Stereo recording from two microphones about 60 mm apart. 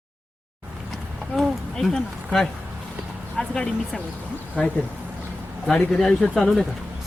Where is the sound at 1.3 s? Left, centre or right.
Centre.